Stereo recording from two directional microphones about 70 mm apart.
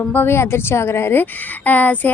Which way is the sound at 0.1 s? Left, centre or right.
Left.